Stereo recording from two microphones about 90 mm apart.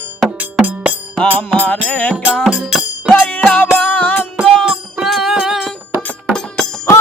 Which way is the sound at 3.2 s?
20° left (ahead or behind).